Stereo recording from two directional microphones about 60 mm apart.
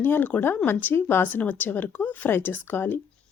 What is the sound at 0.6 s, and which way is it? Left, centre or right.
Speech, left.